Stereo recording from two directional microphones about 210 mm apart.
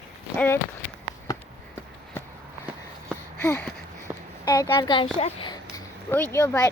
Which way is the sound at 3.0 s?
10° left (ahead or behind).